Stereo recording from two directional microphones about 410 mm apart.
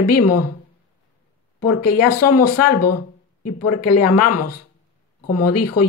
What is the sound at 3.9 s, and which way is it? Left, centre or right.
A woman's voice, left.